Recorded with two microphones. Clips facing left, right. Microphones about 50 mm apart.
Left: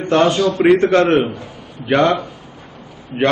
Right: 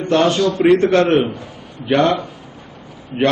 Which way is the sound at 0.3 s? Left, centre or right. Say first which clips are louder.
Even; centre.